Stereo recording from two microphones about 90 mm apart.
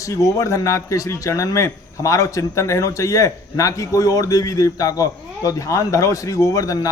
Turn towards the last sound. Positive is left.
turn(degrees=40)  # may be behind; listen again after turning